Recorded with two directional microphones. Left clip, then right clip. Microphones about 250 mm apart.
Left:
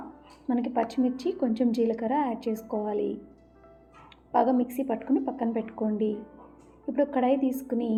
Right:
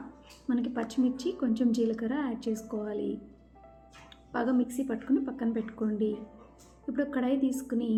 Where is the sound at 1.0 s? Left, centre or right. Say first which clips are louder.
Left 3 dB; centre.